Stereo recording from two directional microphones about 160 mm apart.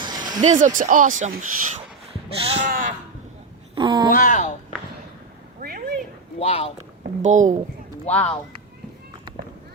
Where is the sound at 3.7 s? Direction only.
30° right (ahead or behind).